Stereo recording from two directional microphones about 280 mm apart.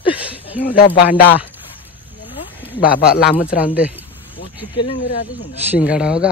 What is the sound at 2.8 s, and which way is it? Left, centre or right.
Speech, left.